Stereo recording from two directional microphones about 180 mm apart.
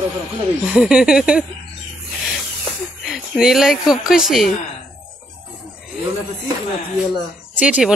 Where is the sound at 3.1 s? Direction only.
Centre (ahead or behind).